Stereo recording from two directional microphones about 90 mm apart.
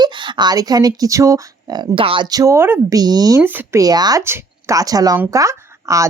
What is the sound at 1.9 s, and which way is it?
Speech, 80° right.